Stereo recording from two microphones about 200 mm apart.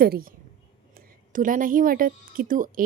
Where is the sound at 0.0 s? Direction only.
45° right (ahead or behind).